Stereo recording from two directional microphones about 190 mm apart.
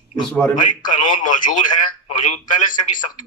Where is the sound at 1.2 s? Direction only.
40° left (ahead or behind).